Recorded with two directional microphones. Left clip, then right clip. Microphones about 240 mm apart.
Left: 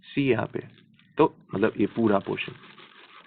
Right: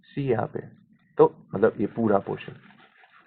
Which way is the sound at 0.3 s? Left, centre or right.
Left.